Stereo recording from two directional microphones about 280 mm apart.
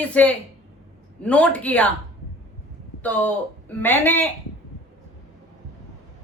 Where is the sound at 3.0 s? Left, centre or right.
Centre.